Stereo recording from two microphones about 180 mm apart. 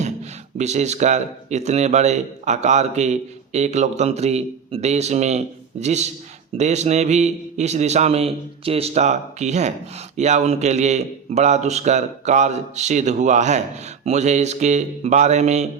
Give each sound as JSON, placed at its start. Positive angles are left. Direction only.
{"t": 0.0, "sound": "speech", "side_deg": -40}